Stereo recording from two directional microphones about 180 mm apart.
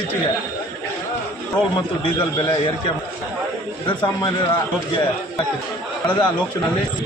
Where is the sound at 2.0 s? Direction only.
25° left (ahead or behind).